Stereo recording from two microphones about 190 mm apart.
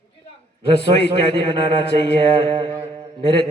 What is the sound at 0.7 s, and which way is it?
Speech, 65° left (ahead or behind).